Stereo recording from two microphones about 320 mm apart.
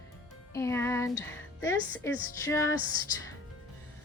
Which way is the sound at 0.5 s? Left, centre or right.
Centre.